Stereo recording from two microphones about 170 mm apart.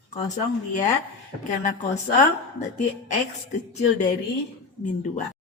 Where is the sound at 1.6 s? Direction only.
45° left (ahead or behind).